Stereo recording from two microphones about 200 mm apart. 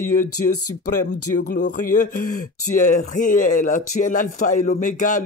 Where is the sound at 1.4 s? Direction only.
40° left (ahead or behind).